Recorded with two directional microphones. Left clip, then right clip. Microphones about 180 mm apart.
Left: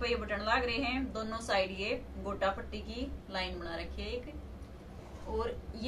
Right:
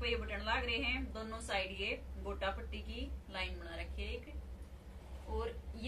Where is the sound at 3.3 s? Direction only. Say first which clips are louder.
Left 5 dB; 5° left (ahead or behind).